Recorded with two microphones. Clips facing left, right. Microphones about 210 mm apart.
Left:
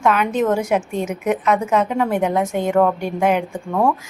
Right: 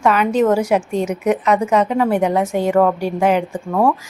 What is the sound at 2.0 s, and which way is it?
A woman's voice, 10° right (ahead or behind).